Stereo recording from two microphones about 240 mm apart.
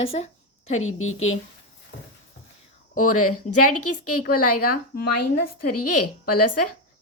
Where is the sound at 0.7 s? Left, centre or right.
Left.